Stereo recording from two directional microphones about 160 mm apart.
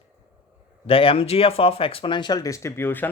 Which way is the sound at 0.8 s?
35° left (ahead or behind).